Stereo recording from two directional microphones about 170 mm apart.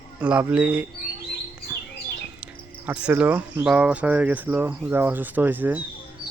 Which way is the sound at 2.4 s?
5° right (ahead or behind).